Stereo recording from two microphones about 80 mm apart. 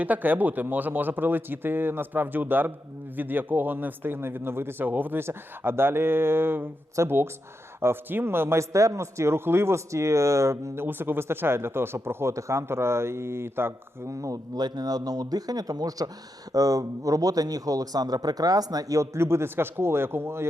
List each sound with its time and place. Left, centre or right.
0.0 s speech: right
14.1 s a man's voice: right